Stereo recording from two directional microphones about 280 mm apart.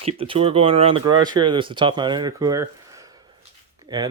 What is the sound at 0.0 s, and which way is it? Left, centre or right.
Speech, centre.